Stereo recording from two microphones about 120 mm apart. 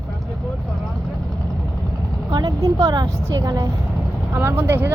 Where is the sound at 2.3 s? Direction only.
35° right (ahead or behind).